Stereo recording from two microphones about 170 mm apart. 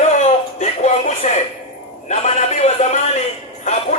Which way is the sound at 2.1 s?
40° left (ahead or behind).